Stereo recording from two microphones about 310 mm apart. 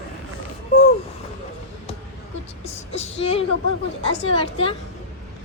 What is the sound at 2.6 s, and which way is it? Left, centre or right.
A woman's voice, left.